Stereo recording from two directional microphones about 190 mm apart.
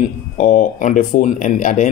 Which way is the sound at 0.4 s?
40° left (ahead or behind).